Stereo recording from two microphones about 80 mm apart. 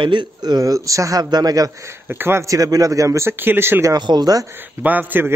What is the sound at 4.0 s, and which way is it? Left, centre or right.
Speech, right.